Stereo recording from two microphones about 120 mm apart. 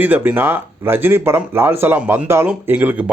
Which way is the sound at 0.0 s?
15° right (ahead or behind).